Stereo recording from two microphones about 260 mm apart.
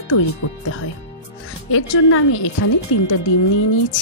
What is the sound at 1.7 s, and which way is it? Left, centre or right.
A woman's voice, left.